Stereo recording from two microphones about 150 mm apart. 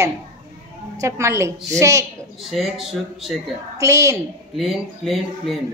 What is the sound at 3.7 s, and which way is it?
Speech, 20° right (ahead or behind).